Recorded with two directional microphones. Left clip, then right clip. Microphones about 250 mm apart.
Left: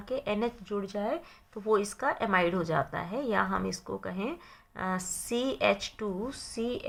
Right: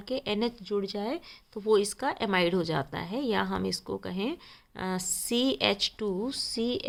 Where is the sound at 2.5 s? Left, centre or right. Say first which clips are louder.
Even; right.